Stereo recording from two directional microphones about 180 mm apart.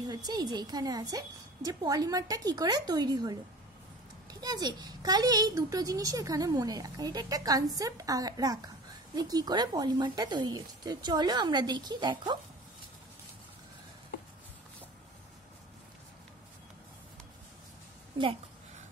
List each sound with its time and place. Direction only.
0.0 s a child's voice: 20° right (ahead or behind)